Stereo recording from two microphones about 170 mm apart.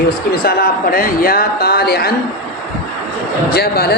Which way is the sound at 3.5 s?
65° left (ahead or behind).